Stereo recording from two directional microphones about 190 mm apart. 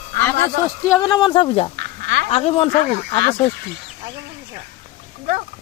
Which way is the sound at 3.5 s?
65° right (ahead or behind).